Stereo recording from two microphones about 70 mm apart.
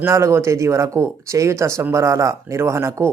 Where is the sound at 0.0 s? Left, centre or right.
Right.